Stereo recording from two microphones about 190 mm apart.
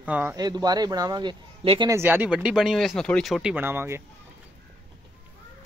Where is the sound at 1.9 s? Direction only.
10° right (ahead or behind).